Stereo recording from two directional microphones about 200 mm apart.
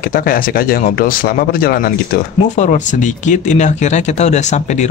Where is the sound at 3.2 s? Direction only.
35° left (ahead or behind).